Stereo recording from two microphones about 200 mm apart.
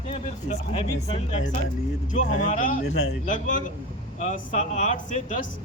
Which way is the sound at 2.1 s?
40° left (ahead or behind).